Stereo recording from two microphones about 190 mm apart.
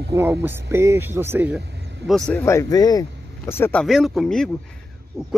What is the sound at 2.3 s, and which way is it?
Speech, 10° left (ahead or behind).